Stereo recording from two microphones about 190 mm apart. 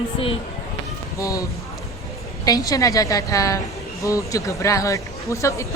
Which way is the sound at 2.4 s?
20° left (ahead or behind).